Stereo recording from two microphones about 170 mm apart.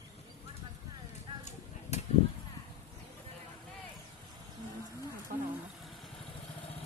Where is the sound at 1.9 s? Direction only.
40° left (ahead or behind).